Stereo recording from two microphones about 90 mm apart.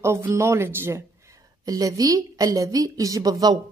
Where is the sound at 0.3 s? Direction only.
30° right (ahead or behind).